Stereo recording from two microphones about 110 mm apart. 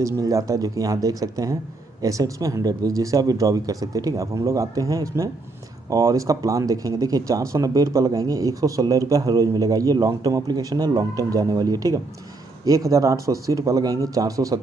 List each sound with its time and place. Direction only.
0.0 s speech: 30° right (ahead or behind)